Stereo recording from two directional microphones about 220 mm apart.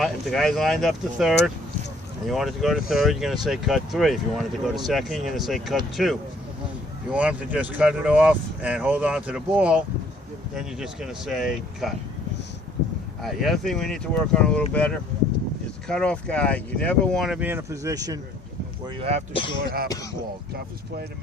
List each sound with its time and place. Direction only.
0.0 s speech: centre (ahead or behind)
13.2 s speech: centre (ahead or behind); by 18.2 s 15° right (ahead or behind)
18.9 s speech: 30° right (ahead or behind)
19.3 s speech: 25° left (ahead or behind)